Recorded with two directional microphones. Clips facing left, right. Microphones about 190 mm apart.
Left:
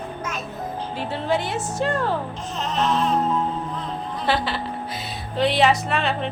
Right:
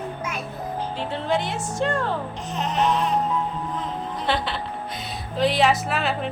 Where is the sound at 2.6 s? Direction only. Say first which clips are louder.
Even; 15° right (ahead or behind).